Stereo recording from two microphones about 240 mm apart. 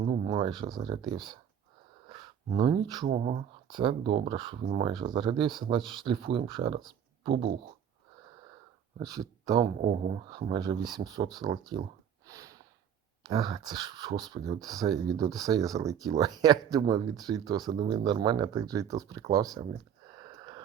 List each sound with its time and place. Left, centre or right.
0.3 s speech: centre
3.1 s speech: right
9.0 s speech: centre
9.8 s speech: right
12.3 s snort: centre
13.2 s speech: centre
20.1 s wheeze: centre